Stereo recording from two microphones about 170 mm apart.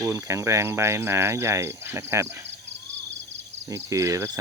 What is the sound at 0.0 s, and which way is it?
Speech, 15° right (ahead or behind).